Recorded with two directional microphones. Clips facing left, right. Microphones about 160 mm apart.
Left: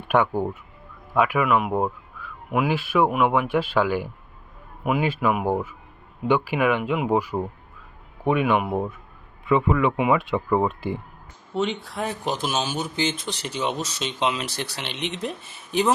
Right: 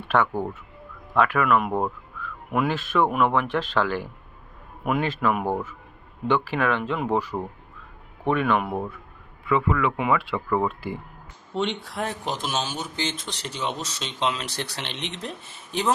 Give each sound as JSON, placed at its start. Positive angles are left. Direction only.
{"t": 0.1, "sound": "speech", "side_deg": 15}
{"t": 11.5, "sound": "speech", "side_deg": 0}